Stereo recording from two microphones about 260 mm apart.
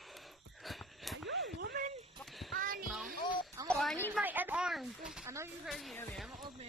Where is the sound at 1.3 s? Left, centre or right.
Right.